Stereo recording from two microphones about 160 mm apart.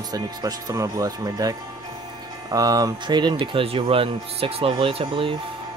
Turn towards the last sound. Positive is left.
turn(degrees=-35)  # may be behind; listen again after turning